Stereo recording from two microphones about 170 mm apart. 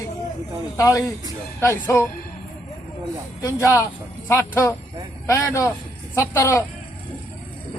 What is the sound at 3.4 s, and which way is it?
Speech, 15° left (ahead or behind).